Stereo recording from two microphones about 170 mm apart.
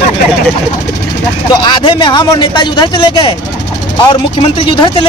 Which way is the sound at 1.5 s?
25° left (ahead or behind).